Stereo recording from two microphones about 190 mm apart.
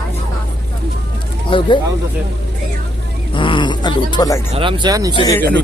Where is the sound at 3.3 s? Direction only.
25° left (ahead or behind).